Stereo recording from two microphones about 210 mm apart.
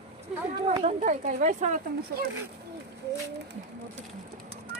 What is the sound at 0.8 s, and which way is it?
Speech, 35° right (ahead or behind).